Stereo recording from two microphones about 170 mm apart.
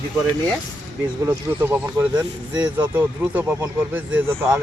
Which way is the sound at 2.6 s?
10° right (ahead or behind).